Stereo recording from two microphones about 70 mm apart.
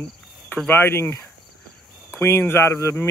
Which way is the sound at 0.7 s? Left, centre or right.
Left.